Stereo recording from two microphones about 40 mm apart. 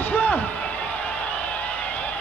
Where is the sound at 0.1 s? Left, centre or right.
Left.